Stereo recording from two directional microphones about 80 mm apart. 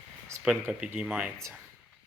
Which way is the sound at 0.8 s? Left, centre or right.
Centre.